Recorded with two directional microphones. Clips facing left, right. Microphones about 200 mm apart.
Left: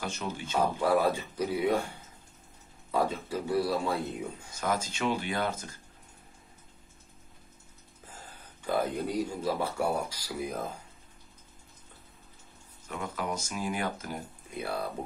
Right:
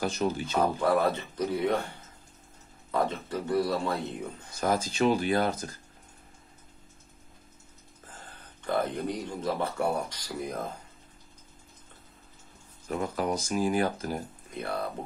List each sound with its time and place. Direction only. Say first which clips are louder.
0.0 s speech: right 8 dB; 35° right (ahead or behind)
0.7 s speech: right 1 dB; 10° left (ahead or behind)
2.9 s speech: even; 10° left (ahead or behind)
4.6 s speech: right 5 dB; 35° right (ahead or behind)
8.6 s speech: right 1 dB; 10° left (ahead or behind)
12.8 s speech: right 5 dB; 35° right (ahead or behind)
14.5 s speech: right 1 dB; 10° left (ahead or behind)